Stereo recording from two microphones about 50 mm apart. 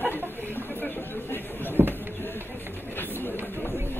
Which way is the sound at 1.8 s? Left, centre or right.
Right.